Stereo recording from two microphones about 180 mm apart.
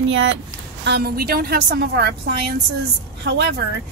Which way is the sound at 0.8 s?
65° right (ahead or behind).